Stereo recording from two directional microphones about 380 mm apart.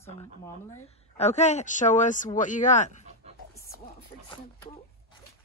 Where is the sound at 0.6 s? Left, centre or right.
Centre.